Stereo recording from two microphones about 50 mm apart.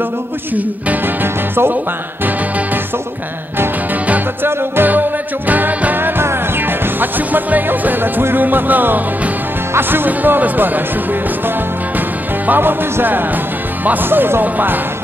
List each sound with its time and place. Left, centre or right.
1.0 s speech: right
4.4 s speech: right
5.5 s music: right
5.9 s music: right
9.8 s speech: right
12.4 s speech: right